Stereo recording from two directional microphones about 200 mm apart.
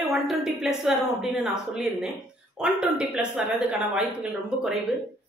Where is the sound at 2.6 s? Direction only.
5° right (ahead or behind).